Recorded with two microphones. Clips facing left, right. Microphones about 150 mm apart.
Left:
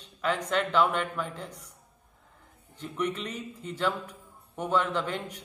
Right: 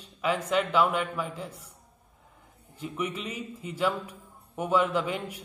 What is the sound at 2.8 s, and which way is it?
A man's voice, 5° right (ahead or behind).